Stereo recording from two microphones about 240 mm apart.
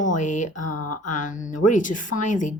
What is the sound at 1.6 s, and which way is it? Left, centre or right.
Speech, left.